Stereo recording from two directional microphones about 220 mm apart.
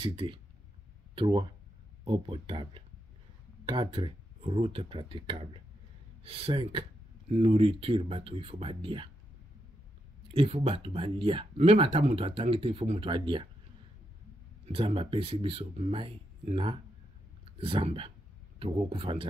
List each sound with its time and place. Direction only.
0.0 s speech: 25° right (ahead or behind)
10.2 s speech: 25° right (ahead or behind)
14.7 s speech: 25° right (ahead or behind)